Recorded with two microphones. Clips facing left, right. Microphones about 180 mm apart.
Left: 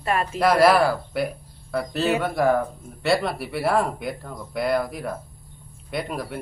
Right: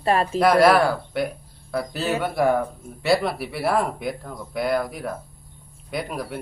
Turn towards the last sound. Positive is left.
turn(degrees=0)  # may be behind; listen again after turning